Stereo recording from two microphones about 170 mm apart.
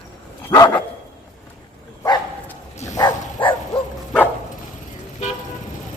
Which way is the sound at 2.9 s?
25° left (ahead or behind).